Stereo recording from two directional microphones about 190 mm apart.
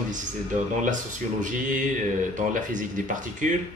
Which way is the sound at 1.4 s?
45° right (ahead or behind).